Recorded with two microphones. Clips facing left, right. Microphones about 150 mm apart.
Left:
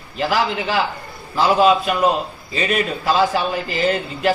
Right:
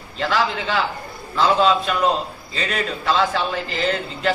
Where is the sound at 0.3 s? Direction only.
15° left (ahead or behind).